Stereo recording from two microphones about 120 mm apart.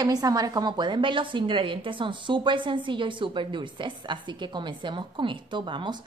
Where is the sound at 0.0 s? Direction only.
30° right (ahead or behind).